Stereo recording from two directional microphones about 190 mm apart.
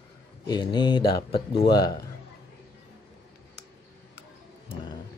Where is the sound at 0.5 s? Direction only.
25° left (ahead or behind).